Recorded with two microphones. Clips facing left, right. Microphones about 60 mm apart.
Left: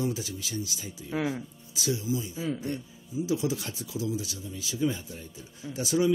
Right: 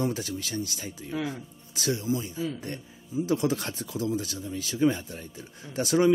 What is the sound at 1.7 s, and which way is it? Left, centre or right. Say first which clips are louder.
Speech: right 2 dB; right.